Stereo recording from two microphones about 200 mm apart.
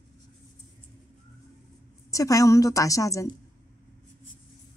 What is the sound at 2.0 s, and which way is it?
A woman's voice, 15° left (ahead or behind).